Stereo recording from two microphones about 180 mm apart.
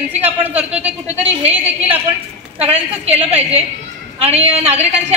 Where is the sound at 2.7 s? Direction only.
35° right (ahead or behind).